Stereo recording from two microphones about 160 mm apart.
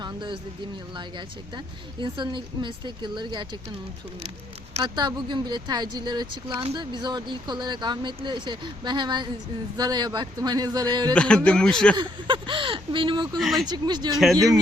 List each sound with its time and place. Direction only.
0.0 s speech: 30° right (ahead or behind)
4.8 s speech: 30° right (ahead or behind)
11.1 s a man's voice: 5° left (ahead or behind)
11.9 s speech: 30° right (ahead or behind)
13.4 s a man's voice: centre (ahead or behind)
13.7 s speech: 25° right (ahead or behind)